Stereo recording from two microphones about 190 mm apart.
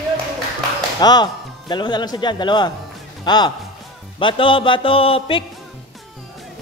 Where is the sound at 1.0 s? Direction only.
20° left (ahead or behind).